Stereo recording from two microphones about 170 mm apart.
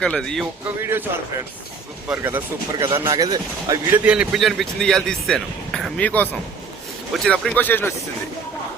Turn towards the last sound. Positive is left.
turn(degrees=10)  # may be behind; listen again after turning